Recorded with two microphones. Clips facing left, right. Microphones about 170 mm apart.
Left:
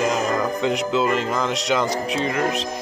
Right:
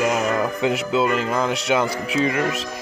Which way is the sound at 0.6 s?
5° right (ahead or behind).